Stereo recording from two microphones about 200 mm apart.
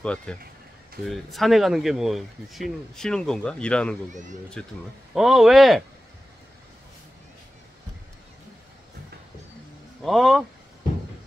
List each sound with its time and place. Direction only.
0.0 s speech: 5° left (ahead or behind)
4.1 s speech: 40° right (ahead or behind)
5.1 s speech: centre (ahead or behind)
10.0 s speech: centre (ahead or behind)